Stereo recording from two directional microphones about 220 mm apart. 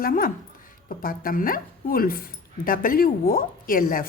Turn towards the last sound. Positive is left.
turn(degrees=40)  # may be behind; listen again after turning